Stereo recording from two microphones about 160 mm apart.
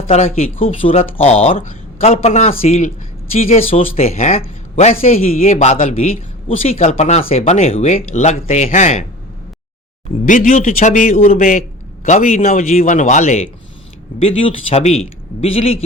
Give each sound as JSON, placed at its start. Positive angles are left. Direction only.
{"t": 0.3, "sound": "speech", "side_deg": 35}
{"t": 10.2, "sound": "a man's voice", "side_deg": 55}
{"t": 14.2, "sound": "speech", "side_deg": 35}